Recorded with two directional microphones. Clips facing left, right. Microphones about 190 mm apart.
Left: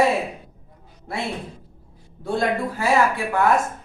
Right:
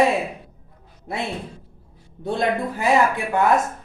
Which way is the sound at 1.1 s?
20° right (ahead or behind).